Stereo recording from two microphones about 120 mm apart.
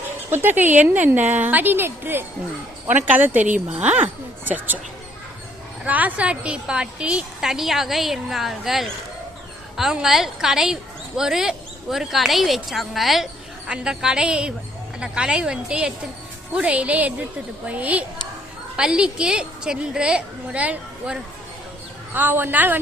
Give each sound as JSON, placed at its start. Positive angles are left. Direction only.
{"t": 0.3, "sound": "a woman's voice", "side_deg": -20}
{"t": 5.8, "sound": "a woman's voice", "side_deg": -15}